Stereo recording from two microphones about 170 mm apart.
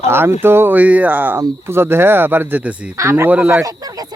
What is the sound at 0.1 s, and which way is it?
Speech, 15° right (ahead or behind).